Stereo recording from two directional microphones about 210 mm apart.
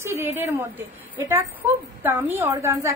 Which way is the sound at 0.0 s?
15° right (ahead or behind).